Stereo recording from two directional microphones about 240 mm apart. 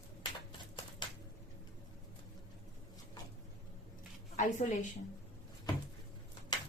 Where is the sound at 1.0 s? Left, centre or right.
Centre.